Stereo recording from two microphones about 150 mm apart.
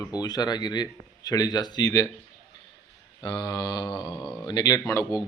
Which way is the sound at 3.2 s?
25° left (ahead or behind).